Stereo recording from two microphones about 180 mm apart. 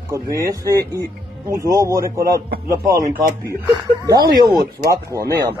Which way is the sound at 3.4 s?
15° right (ahead or behind).